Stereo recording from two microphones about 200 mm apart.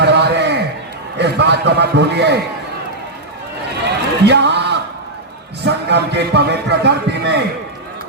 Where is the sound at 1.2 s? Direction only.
60° right (ahead or behind).